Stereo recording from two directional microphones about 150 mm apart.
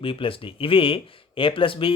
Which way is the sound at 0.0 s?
35° left (ahead or behind).